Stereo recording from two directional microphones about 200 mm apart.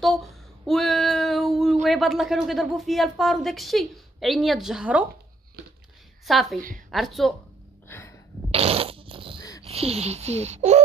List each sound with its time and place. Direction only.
0.0 s speech: centre (ahead or behind)
6.2 s a woman's voice: centre (ahead or behind)
7.9 s a sound: 15° left (ahead or behind)
8.5 s fart: 30° right (ahead or behind)
9.4 s a sound: 20° left (ahead or behind)
9.7 s speech: 30° right (ahead or behind)